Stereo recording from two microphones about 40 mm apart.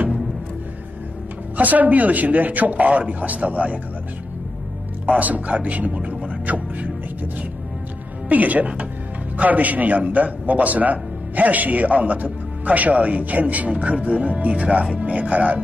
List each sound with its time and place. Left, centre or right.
1.6 s a man's voice: right
5.0 s speech: right
8.3 s a man's voice: right